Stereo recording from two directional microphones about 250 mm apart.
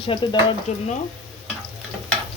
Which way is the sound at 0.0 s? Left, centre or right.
Centre.